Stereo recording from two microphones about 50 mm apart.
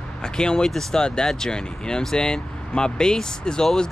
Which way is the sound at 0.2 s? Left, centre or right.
Centre.